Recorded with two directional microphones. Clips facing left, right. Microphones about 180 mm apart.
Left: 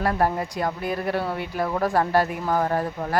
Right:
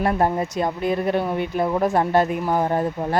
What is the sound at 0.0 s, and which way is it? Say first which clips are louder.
Speech: right 3 dB; 20° right (ahead or behind).